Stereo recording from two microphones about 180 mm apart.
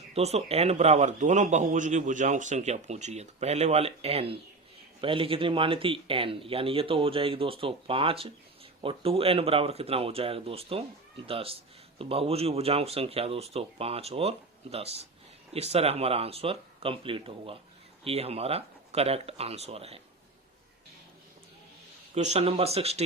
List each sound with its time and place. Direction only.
0.1 s speech: 35° right (ahead or behind)
22.1 s speech: 35° right (ahead or behind)